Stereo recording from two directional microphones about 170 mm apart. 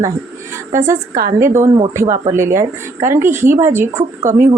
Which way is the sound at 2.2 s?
15° right (ahead or behind).